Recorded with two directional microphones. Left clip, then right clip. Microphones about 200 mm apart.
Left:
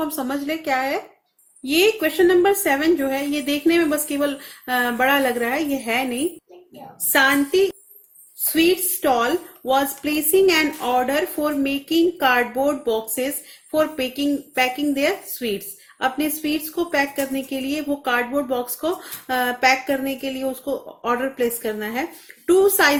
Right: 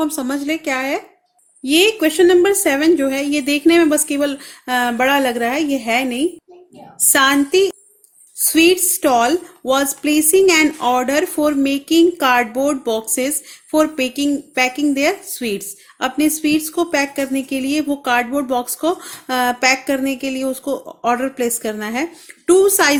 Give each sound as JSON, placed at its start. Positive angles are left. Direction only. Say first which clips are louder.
{"t": 0.0, "sound": "a woman's voice", "louder": "right 4 dB", "side_deg": -30}